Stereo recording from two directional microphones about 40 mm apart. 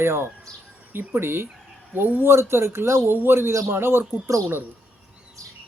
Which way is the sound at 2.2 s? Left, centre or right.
Right.